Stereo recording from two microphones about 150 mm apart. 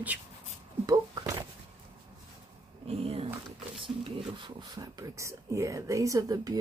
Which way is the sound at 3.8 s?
35° right (ahead or behind).